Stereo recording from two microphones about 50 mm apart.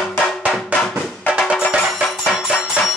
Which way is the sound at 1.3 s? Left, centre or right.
Centre.